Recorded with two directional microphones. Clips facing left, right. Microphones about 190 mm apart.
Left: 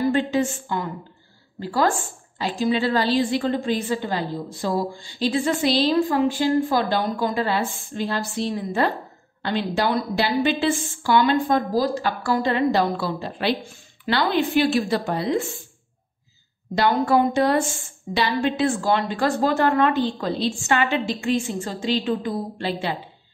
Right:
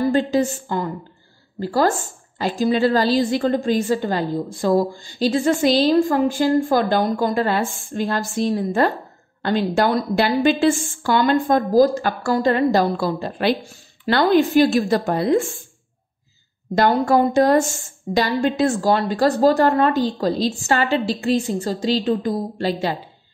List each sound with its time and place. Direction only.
0.1 s a woman's voice: 35° right (ahead or behind)
16.7 s a woman's voice: 45° right (ahead or behind)